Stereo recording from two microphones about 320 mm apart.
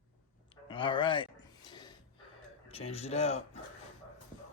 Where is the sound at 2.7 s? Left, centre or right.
Centre.